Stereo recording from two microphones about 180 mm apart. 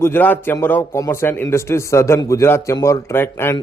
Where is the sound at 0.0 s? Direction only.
10° left (ahead or behind).